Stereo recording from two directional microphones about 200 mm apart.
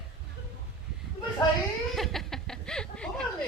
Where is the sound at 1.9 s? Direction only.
Centre (ahead or behind).